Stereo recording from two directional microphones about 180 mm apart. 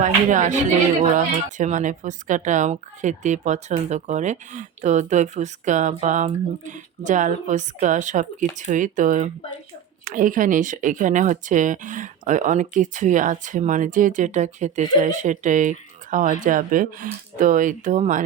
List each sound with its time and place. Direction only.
0.0 s speech: 45° right (ahead or behind)